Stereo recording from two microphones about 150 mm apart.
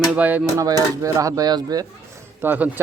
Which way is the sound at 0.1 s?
10° right (ahead or behind).